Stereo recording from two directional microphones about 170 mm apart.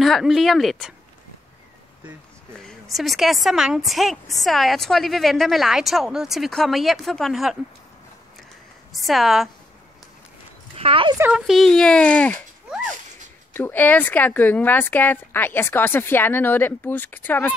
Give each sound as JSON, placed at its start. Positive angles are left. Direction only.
{"t": 0.0, "sound": "a woman's voice", "side_deg": 0}
{"t": 2.6, "sound": "a woman's voice", "side_deg": 0}
{"t": 8.9, "sound": "a woman's voice", "side_deg": 0}
{"t": 10.8, "sound": "speech", "side_deg": -30}
{"t": 11.1, "sound": "a woman's voice", "side_deg": -5}
{"t": 13.5, "sound": "speech", "side_deg": 10}